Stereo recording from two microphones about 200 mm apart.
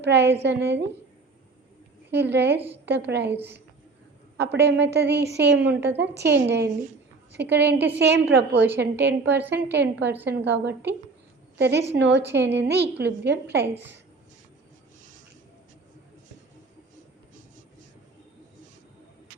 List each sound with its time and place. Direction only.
0.0 s a woman's voice: 60° right (ahead or behind)
2.2 s a woman's voice: 55° right (ahead or behind)
3.3 s a woman's voice: 10° right (ahead or behind)
4.4 s a woman's voice: 55° right (ahead or behind)
8.5 s a woman's voice: 10° right (ahead or behind)
8.8 s a woman's voice: 60° right (ahead or behind)
9.4 s a woman's voice: 10° right (ahead or behind)
9.7 s a woman's voice: 60° right (ahead or behind)